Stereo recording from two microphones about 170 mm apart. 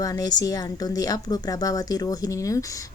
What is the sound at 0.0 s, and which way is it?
A woman's voice, 20° left (ahead or behind).